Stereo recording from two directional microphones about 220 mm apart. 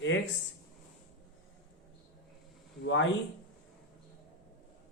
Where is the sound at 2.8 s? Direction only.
60° left (ahead or behind).